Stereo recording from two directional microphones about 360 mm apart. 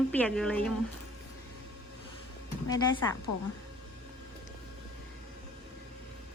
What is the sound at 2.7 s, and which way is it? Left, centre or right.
Speech, centre.